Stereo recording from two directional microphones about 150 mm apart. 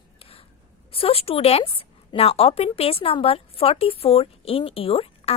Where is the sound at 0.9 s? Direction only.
40° left (ahead or behind).